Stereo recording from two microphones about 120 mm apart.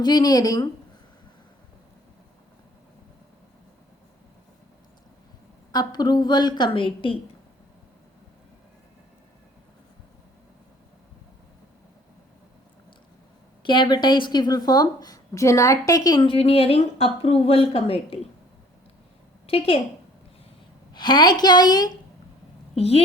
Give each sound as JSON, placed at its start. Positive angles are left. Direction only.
{"t": 0.0, "sound": "speech", "side_deg": 35}
{"t": 5.7, "sound": "speech", "side_deg": 35}
{"t": 13.6, "sound": "speech", "side_deg": 40}
{"t": 16.2, "sound": "speech", "side_deg": 50}
{"t": 19.5, "sound": "speech", "side_deg": 50}
{"t": 20.9, "sound": "speech", "side_deg": 35}
{"t": 22.7, "sound": "a woman's voice", "side_deg": 55}